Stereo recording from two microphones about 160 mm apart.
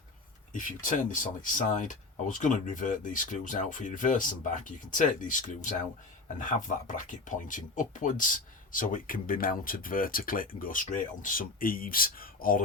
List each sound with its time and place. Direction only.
0.5 s speech: 55° left (ahead or behind)